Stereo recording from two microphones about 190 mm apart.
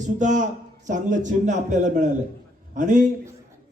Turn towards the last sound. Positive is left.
turn(degrees=-40)  # may be behind; listen again after turning